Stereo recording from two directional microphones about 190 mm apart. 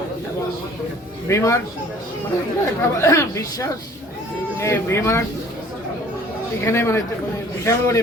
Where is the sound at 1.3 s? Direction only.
15° left (ahead or behind).